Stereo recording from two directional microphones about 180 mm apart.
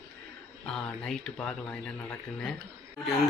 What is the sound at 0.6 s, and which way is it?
Speech, 5° left (ahead or behind).